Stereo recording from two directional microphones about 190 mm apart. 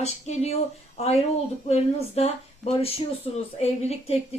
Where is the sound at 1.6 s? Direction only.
35° left (ahead or behind).